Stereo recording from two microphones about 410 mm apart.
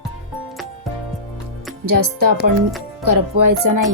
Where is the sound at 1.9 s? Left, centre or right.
Right.